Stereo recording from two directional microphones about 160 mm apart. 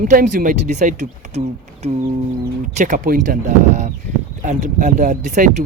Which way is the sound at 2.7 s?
50° right (ahead or behind).